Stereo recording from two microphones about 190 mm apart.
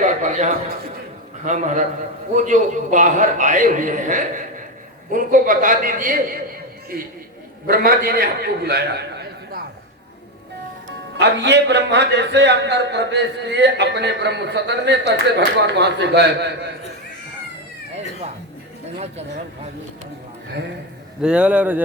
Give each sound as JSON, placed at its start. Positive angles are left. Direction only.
{"t": 0.0, "sound": "a sound", "side_deg": -40}
{"t": 1.5, "sound": "a man's voice", "side_deg": -40}
{"t": 11.2, "sound": "speech", "side_deg": -65}
{"t": 21.2, "sound": "speech", "side_deg": -5}